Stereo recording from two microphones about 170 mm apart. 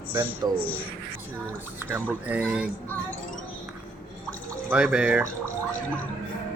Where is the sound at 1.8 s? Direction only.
10° right (ahead or behind).